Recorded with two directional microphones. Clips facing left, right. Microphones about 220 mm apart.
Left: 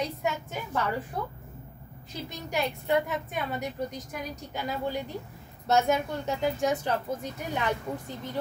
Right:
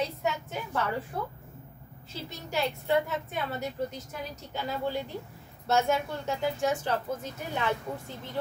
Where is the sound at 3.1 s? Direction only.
15° left (ahead or behind).